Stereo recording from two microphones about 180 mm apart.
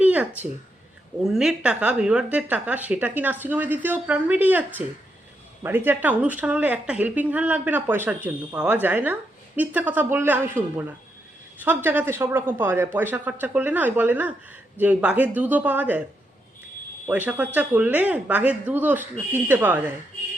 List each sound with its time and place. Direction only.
0.0 s a sound: 10° right (ahead or behind)
1.2 s speech: 5° right (ahead or behind)
17.1 s speech: 10° right (ahead or behind)